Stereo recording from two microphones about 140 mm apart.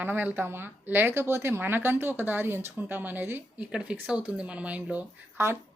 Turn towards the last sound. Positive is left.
turn(degrees=-15)  # may be behind; listen again after turning